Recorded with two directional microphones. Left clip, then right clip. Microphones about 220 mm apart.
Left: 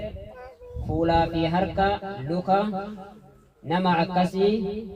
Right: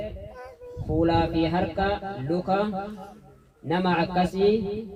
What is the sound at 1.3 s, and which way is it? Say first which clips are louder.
Speech: even; 45° left (ahead or behind).